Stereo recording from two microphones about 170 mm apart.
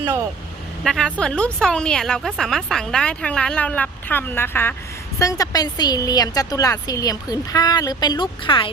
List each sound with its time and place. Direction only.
0.9 s a woman's voice: 5° left (ahead or behind); by 8.7 s 30° left (ahead or behind)